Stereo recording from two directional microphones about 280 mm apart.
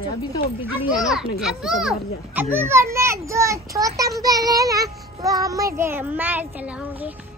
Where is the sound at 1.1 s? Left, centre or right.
Centre.